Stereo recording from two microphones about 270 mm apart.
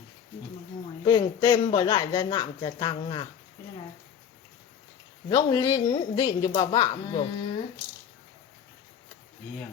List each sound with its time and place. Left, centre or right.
1.0 s speech: centre
5.3 s speech: centre